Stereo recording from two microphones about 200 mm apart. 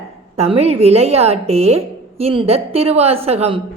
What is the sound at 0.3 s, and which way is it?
A woman's voice, 30° right (ahead or behind).